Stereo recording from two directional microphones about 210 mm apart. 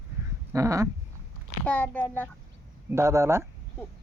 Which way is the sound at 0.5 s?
15° right (ahead or behind).